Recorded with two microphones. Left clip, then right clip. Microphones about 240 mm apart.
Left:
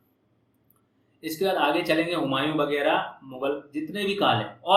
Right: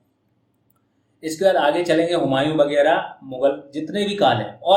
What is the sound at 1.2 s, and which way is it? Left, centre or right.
Speech, right.